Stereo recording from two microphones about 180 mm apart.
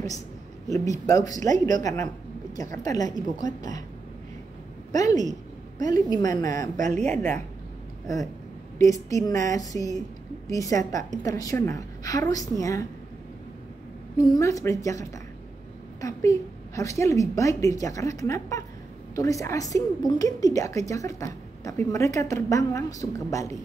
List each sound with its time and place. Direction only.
0.9 s a woman's voice: 20° left (ahead or behind)
4.9 s a woman's voice: 20° left (ahead or behind)
6.8 s speech: 40° right (ahead or behind)
8.7 s a woman's voice: 20° left (ahead or behind)
14.1 s a woman's voice: 20° left (ahead or behind)